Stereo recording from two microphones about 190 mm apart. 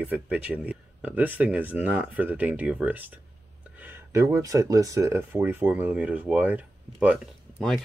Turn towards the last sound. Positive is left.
turn(degrees=0)  # may be behind; listen again after turning